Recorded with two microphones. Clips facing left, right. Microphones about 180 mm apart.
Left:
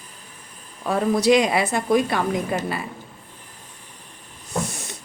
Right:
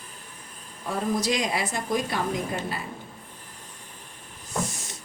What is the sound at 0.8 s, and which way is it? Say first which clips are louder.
Speech: left 8 dB; 65° left (ahead or behind).